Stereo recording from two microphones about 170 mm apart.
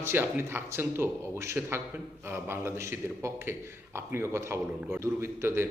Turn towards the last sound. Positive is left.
turn(degrees=-15)  # may be behind; listen again after turning